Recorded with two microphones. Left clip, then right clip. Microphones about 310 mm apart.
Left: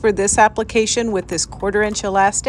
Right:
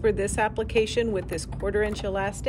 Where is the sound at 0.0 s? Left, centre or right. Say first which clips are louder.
Left 10 dB; left.